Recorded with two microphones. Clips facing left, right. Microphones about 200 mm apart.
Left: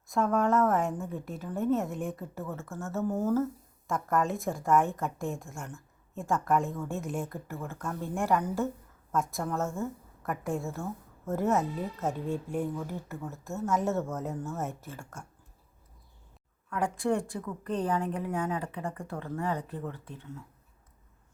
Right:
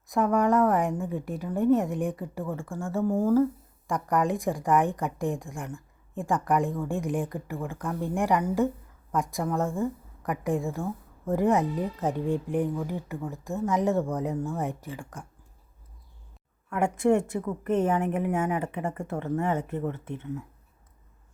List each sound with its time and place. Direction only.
0.3 s speech: 15° right (ahead or behind)
16.6 s speech: 25° right (ahead or behind)